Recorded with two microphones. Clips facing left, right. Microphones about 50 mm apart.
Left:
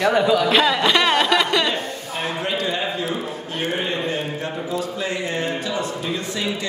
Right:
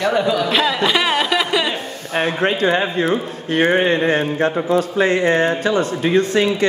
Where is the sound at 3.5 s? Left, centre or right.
Right.